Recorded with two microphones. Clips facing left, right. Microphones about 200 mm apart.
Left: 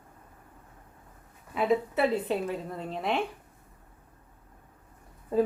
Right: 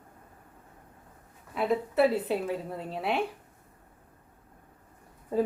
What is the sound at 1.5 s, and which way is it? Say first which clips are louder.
A woman's voice: even; centre (ahead or behind).